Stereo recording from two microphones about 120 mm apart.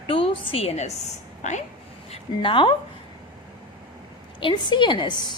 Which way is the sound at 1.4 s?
80° left.